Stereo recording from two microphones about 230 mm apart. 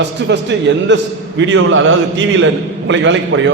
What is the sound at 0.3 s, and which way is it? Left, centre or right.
A man's voice, right.